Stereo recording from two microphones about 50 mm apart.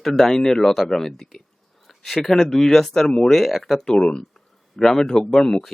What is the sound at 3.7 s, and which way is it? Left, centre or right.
Speech, centre.